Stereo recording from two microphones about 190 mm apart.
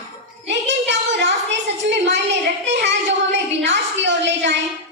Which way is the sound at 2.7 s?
65° right (ahead or behind).